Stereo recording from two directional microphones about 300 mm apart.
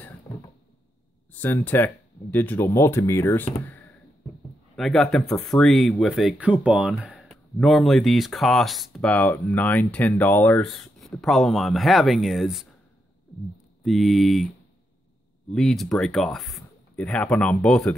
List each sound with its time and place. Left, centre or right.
1.3 s speech: centre
4.7 s speech: centre
13.8 s speech: centre
15.5 s speech: centre